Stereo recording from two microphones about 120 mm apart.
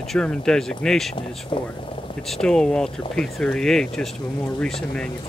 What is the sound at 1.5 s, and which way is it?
Speech, 45° left (ahead or behind).